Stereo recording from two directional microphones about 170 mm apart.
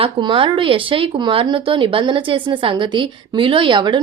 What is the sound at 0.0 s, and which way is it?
Speech, 30° right (ahead or behind).